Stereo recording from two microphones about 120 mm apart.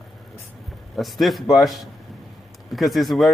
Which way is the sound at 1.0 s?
Centre (ahead or behind).